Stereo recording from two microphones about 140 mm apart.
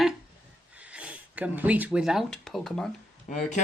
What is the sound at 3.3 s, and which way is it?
Speech, 60° left (ahead or behind).